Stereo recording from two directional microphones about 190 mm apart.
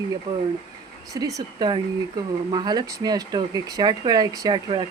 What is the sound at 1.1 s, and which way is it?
Speech, 20° right (ahead or behind).